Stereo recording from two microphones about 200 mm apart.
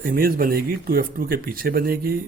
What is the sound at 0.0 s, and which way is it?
Speech, 45° right (ahead or behind).